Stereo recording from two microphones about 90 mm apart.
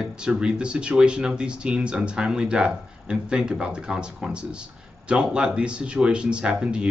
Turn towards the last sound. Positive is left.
turn(degrees=-10)  # may be behind; listen again after turning